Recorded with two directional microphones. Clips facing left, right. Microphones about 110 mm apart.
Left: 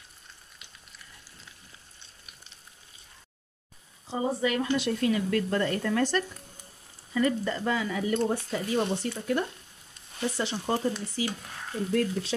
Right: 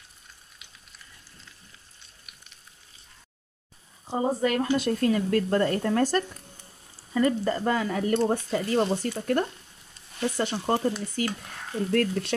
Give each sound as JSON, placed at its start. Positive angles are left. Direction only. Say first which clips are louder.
{"t": 4.1, "sound": "speech", "louder": "right 3 dB", "side_deg": -45}